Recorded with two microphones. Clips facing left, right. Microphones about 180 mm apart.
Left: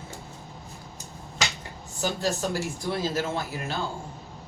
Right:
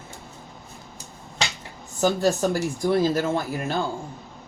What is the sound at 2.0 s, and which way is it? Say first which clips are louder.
Speech: right 7 dB; 50° right (ahead or behind).